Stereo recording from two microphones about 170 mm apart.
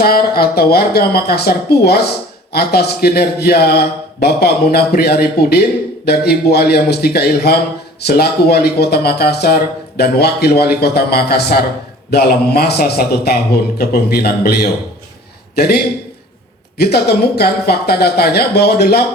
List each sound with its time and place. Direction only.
0.0 s speech: 65° left (ahead or behind)